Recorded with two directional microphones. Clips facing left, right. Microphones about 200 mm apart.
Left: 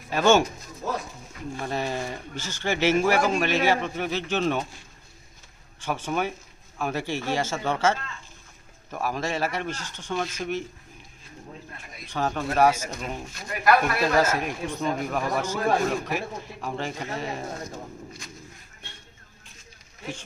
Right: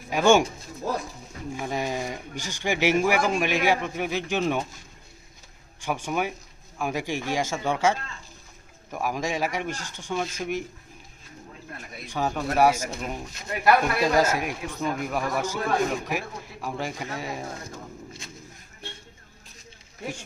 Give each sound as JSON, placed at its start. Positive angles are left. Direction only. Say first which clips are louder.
{"t": 0.1, "sound": "speech", "louder": "right 1 dB", "side_deg": -15}
{"t": 1.5, "sound": "speech", "louder": "even", "side_deg": -10}
{"t": 5.8, "sound": "speech", "louder": "even", "side_deg": -10}
{"t": 12.0, "sound": "speech", "louder": "even", "side_deg": -10}
{"t": 13.5, "sound": "speech", "louder": "even", "side_deg": -25}
{"t": 14.0, "sound": "speech", "louder": "even", "side_deg": -10}
{"t": 18.2, "sound": "a sound", "louder": "even", "side_deg": -25}